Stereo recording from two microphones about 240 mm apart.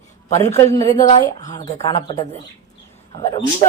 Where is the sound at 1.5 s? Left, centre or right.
Centre.